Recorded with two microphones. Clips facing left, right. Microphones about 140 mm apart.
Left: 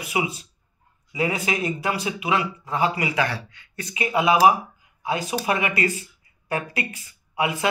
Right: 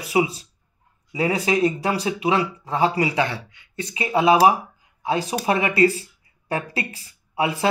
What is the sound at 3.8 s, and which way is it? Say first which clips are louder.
Speech: right 3 dB; 30° right (ahead or behind).